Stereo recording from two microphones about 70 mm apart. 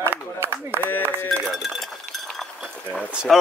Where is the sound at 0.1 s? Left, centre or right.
Right.